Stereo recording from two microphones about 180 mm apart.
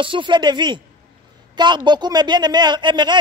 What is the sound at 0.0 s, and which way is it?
A man's voice, 25° right (ahead or behind).